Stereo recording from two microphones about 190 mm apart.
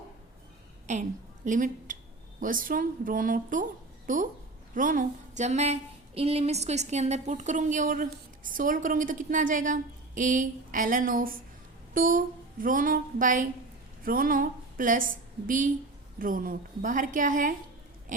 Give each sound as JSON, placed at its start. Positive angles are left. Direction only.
{"t": 0.9, "sound": "a woman's voice", "side_deg": -40}